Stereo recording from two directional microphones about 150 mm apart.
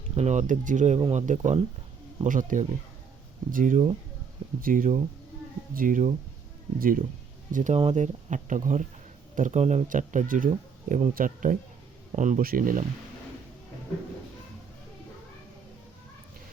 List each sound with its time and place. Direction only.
0.2 s speech: 50° right (ahead or behind)
6.7 s speech: 70° right (ahead or behind)
7.5 s speech: 55° right (ahead or behind)